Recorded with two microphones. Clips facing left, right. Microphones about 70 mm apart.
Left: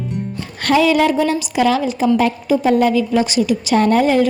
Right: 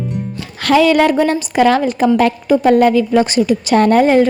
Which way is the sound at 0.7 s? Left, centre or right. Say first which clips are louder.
Right 3 dB; right.